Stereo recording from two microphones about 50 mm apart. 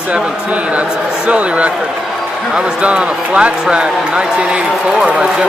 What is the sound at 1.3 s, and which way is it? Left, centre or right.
A man's voice, right.